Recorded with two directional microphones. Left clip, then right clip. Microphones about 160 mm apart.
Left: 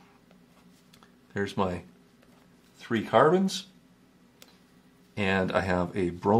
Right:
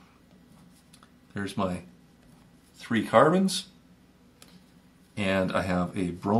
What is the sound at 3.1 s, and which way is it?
Speech, 45° left (ahead or behind).